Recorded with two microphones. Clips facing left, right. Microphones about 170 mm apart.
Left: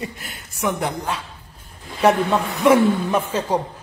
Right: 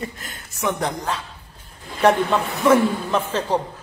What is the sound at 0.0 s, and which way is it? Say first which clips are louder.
A woman's voice: even; 15° left (ahead or behind).